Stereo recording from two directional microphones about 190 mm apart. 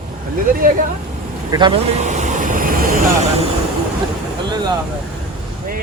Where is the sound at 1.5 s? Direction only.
25° right (ahead or behind); by 3.3 s 45° right (ahead or behind).